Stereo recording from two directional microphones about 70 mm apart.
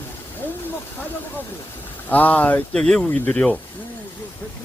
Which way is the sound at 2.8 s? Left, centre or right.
Centre.